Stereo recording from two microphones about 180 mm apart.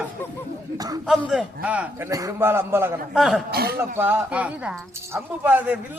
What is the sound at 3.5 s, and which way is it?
Speech, 60° right (ahead or behind).